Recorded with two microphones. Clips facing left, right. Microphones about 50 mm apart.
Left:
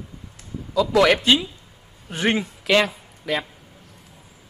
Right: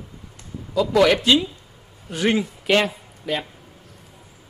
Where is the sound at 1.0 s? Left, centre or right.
Left.